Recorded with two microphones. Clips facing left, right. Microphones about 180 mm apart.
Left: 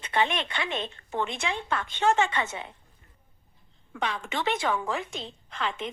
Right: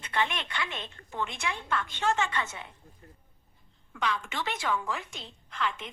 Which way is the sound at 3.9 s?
30° left (ahead or behind).